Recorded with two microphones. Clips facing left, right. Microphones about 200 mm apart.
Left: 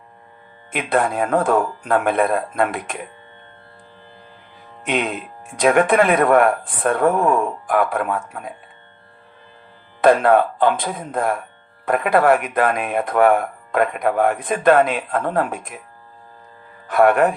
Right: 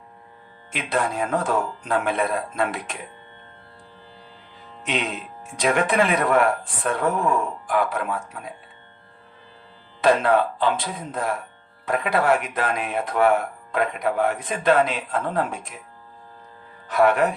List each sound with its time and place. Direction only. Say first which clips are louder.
0.7 s speech: left 5 dB; 55° left (ahead or behind)
4.8 s speech: left 5 dB; 55° left (ahead or behind)
10.0 s speech: left 5 dB; 55° left (ahead or behind)
16.8 s speech: left 4 dB; 55° left (ahead or behind)